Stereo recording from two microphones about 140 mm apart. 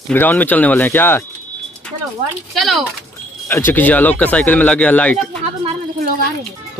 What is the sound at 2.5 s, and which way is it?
Speech, centre (ahead or behind).